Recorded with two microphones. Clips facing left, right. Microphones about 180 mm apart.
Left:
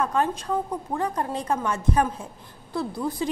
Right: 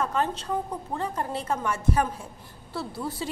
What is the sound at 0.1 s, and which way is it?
A woman's voice, 15° left (ahead or behind).